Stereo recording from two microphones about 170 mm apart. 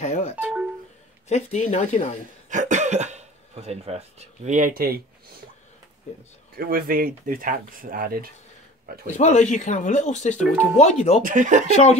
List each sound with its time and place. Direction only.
0.0 s doorbell: 45° left (ahead or behind)
0.4 s doorbell: 5° right (ahead or behind)
1.3 s speech: 40° left (ahead or behind)
2.5 s speech: 45° right (ahead or behind); by 5.0 s 60° right (ahead or behind)
6.5 s speech: 60° right (ahead or behind)
9.0 s speech: 45° left (ahead or behind)
11.2 s speech: 50° right (ahead or behind)
11.7 s speech: 40° left (ahead or behind)